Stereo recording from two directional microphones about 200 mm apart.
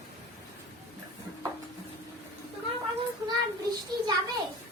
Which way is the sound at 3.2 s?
20° right (ahead or behind).